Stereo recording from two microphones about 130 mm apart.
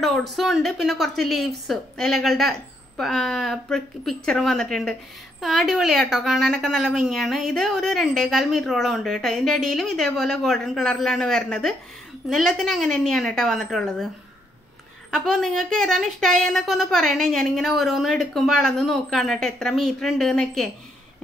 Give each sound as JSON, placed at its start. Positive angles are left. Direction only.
{"t": 0.0, "sound": "a woman's voice", "side_deg": 0}
{"t": 15.0, "sound": "a woman's voice", "side_deg": 5}